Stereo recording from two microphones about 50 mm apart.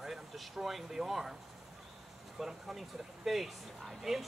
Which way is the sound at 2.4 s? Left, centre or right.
Centre.